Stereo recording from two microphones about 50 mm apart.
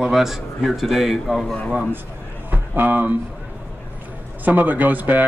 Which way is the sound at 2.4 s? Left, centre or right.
Right.